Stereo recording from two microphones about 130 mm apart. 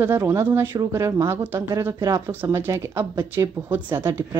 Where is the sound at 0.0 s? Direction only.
20° right (ahead or behind).